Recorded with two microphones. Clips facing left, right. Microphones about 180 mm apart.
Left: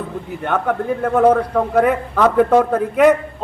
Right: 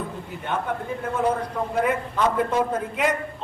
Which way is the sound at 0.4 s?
60° left (ahead or behind).